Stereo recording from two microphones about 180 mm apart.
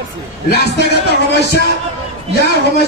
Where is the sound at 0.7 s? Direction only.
65° left (ahead or behind).